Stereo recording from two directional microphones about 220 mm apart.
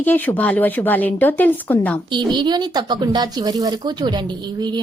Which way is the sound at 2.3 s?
20° right (ahead or behind).